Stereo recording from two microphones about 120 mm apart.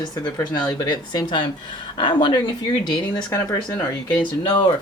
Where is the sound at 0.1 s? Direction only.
35° left (ahead or behind).